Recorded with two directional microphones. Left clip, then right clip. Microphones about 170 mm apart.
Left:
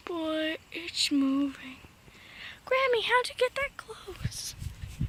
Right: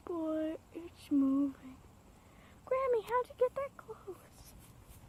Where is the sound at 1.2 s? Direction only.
20° left (ahead or behind).